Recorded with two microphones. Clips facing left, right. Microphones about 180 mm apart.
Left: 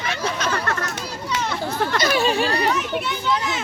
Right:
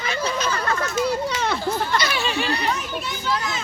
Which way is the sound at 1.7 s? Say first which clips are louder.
Left 3 dB; 50° left (ahead or behind).